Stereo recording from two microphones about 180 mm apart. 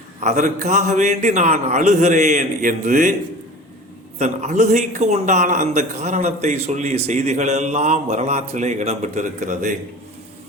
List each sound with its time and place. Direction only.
0.2 s a man's voice: 40° right (ahead or behind)
4.2 s a man's voice: 40° right (ahead or behind)